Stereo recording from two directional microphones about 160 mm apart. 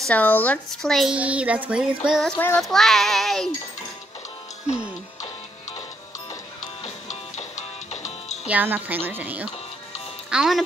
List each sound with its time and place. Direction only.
0.0 s speech: 10° left (ahead or behind)
2.3 s a child's voice: 10° left (ahead or behind)
7.9 s music: 45° left (ahead or behind)
8.5 s a woman's voice: 10° right (ahead or behind)